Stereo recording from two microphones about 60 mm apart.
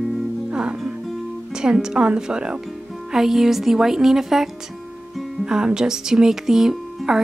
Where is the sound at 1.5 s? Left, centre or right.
Centre.